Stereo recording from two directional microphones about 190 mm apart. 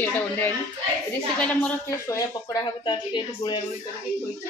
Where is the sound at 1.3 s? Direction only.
5° left (ahead or behind).